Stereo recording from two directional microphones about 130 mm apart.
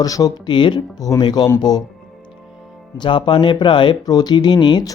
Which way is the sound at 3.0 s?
40° left (ahead or behind).